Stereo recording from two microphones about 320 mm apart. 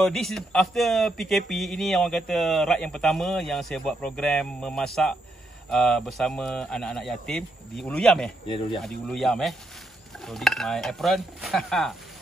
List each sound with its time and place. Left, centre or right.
0.0 s speech: centre